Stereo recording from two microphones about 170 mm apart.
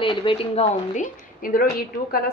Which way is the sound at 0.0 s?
30° left (ahead or behind).